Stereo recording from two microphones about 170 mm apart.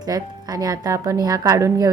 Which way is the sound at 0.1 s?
20° right (ahead or behind).